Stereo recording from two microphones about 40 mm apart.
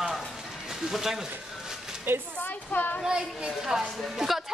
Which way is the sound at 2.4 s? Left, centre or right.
Left.